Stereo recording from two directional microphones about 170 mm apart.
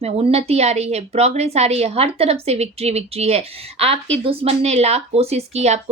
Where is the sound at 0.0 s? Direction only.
35° right (ahead or behind).